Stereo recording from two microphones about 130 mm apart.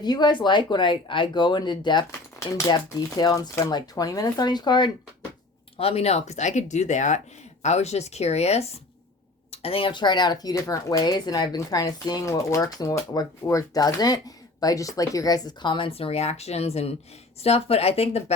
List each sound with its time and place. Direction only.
0.0 s speech: 35° left (ahead or behind)
5.7 s speech: 50° left (ahead or behind)